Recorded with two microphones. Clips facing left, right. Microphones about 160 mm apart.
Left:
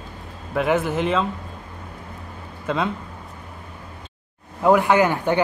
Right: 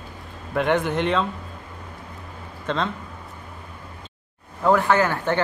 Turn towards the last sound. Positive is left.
turn(degrees=15)  # may be behind; listen again after turning